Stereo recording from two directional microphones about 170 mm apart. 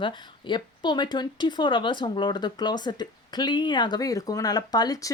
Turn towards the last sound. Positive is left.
turn(degrees=20)  # may be behind; listen again after turning